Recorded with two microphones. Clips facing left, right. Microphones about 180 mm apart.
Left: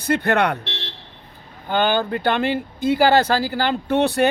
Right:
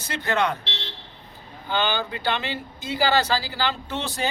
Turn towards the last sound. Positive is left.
turn(degrees=60)  # may be behind; listen again after turning